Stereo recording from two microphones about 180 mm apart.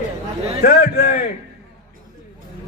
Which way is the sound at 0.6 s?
55° left (ahead or behind).